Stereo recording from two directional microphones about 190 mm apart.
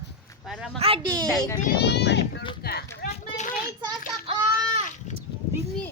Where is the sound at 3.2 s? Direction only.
40° left (ahead or behind).